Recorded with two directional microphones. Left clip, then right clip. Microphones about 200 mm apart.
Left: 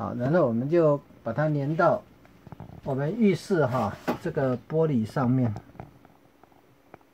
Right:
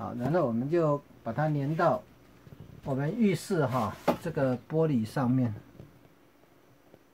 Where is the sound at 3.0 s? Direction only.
20° left (ahead or behind); by 5.5 s 40° left (ahead or behind).